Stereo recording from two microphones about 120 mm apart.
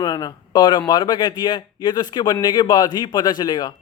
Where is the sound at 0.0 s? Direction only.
35° left (ahead or behind).